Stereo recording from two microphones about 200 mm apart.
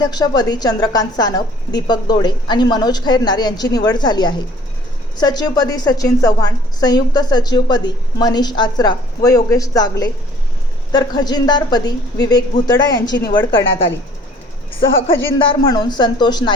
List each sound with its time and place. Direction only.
0.0 s a woman's voice: 20° left (ahead or behind)
13.1 s a woman's voice: 60° left (ahead or behind)
13.5 s a woman's voice: 30° left (ahead or behind)
15.3 s a woman's voice: 20° left (ahead or behind)